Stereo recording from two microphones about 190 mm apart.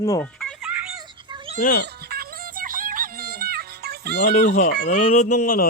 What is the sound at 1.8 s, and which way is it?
Music, 55° right (ahead or behind).